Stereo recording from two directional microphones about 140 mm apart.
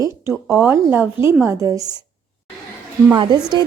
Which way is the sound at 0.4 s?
10° right (ahead or behind).